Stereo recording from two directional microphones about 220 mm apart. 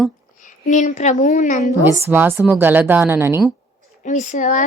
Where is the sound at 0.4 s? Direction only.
35° left (ahead or behind).